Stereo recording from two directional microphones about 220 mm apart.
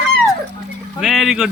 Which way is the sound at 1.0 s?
Centre (ahead or behind).